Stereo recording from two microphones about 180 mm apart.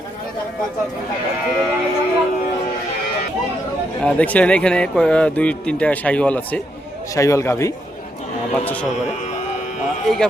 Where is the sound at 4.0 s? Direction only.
5° left (ahead or behind).